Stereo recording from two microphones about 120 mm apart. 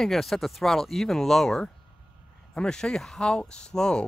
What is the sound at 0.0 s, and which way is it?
Speech, centre (ahead or behind).